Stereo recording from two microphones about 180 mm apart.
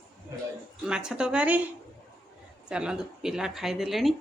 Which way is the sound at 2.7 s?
5° right (ahead or behind).